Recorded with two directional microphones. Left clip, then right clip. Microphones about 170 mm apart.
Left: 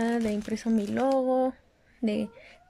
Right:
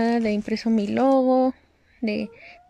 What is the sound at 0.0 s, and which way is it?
Speech, 10° right (ahead or behind).